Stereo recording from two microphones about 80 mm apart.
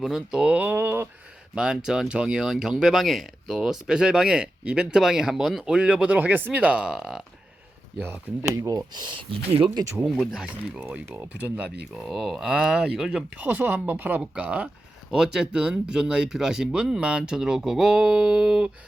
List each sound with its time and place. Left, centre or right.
0.0 s speech: centre; by 1.0 s right
1.5 s speech: centre
8.0 s speech: right
8.5 s speech: right
10.0 s speech: centre
10.8 s speech: right
11.9 s speech: centre
13.3 s speech: right
15.1 s speech: centre